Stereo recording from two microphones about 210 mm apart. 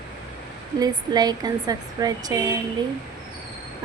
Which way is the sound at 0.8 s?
20° right (ahead or behind).